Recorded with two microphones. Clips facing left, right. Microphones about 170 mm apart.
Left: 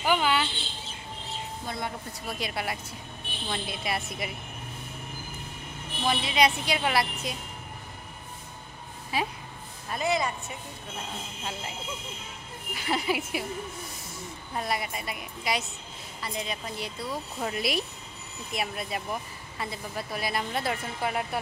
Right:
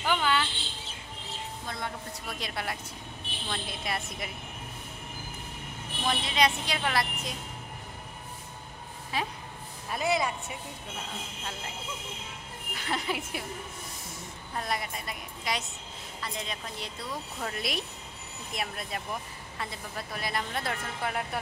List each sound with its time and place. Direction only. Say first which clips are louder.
0.0 s a sound: left 2 dB; 10° left (ahead or behind)
1.7 s speech: left 2 dB; 10° left (ahead or behind)
6.0 s speech: left 3 dB; 10° left (ahead or behind)
9.1 s speech: left 3 dB; 5° left (ahead or behind)
9.8 s speech: left 1 dB; 5° right (ahead or behind)
12.7 s speech: left 4 dB; 5° left (ahead or behind)
14.5 s speech: left 2 dB; 5° left (ahead or behind)